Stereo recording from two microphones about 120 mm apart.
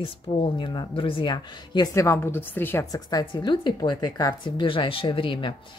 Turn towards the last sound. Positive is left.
turn(degrees=45)  # may be behind; listen again after turning